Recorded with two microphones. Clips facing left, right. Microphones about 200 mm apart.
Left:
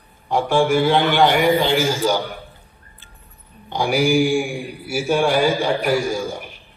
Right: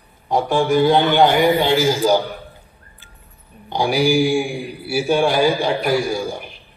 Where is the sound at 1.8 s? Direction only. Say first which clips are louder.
Right 4 dB; 35° right (ahead or behind).